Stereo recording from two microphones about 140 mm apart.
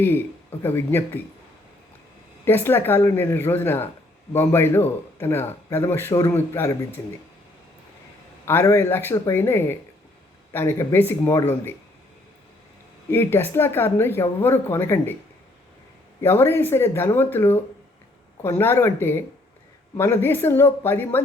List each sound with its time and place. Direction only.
0.0 s speech: 15° left (ahead or behind)
2.4 s speech: 15° left (ahead or behind)
8.4 s speech: 20° left (ahead or behind)
13.1 s speech: 15° left (ahead or behind)
16.2 s speech: 15° left (ahead or behind)